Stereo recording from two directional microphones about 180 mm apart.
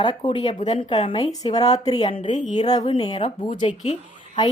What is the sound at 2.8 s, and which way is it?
Speech, 25° left (ahead or behind).